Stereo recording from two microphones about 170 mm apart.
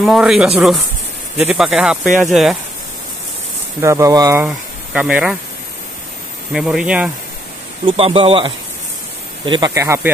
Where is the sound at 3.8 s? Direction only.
20° right (ahead or behind).